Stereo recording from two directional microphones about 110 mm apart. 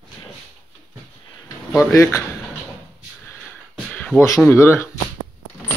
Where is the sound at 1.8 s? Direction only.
25° left (ahead or behind).